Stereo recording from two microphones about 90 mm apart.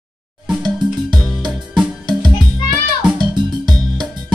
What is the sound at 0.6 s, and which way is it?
Music, 55° right (ahead or behind).